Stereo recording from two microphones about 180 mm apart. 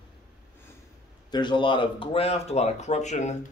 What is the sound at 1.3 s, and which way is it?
Speech, 25° left (ahead or behind).